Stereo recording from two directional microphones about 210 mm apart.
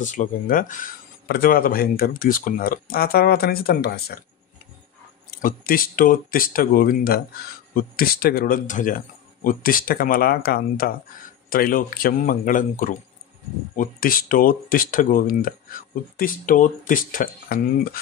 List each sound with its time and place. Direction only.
0.0 s speech: 40° left (ahead or behind)
5.4 s speech: 40° left (ahead or behind)